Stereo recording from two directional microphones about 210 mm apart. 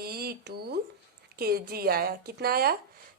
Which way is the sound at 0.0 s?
50° right (ahead or behind).